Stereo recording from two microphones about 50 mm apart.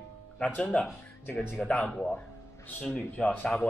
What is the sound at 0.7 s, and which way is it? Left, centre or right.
A man's voice, left.